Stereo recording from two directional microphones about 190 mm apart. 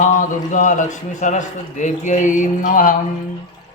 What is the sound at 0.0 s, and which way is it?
A man's voice, 40° left (ahead or behind).